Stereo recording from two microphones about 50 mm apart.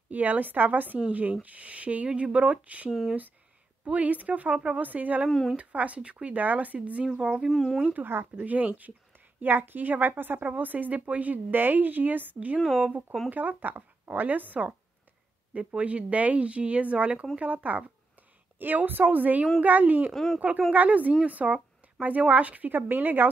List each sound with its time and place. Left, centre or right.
0.1 s a woman's voice: right
5.3 s speech: centre
5.6 s speech: right
7.2 s speech: centre
7.5 s speech: centre
7.8 s speech: right
8.5 s a woman's voice: right
18.6 s a woman's voice: right
20.1 s speech: centre
20.3 s a woman's voice: right
21.8 s a sound: right
22.3 s a woman's voice: right